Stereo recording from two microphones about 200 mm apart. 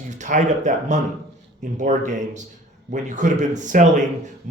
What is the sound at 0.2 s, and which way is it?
Speech, 40° right (ahead or behind).